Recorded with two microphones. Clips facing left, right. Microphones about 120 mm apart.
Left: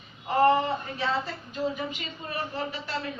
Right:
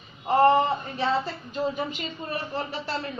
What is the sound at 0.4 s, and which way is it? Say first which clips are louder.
A woman's voice: right 1 dB; 30° right (ahead or behind).